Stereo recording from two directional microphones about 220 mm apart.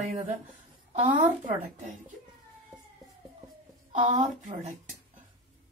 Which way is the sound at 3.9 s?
35° right (ahead or behind).